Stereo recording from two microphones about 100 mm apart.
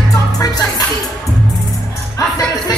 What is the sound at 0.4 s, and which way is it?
Music, 40° left (ahead or behind).